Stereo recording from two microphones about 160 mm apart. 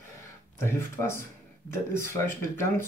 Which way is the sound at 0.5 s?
15° left (ahead or behind).